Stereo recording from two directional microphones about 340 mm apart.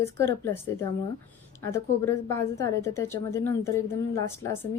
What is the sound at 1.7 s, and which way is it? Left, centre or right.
A woman's voice, centre.